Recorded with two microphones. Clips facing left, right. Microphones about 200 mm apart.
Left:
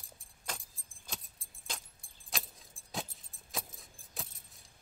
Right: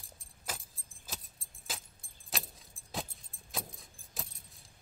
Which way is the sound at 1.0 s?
Centre (ahead or behind).